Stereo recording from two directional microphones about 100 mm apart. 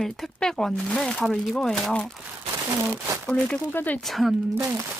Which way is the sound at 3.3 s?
5° left (ahead or behind).